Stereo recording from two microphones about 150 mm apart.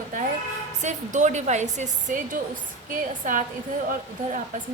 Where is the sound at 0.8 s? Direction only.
55° right (ahead or behind).